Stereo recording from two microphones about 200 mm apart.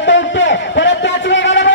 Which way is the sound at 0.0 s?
65° left (ahead or behind).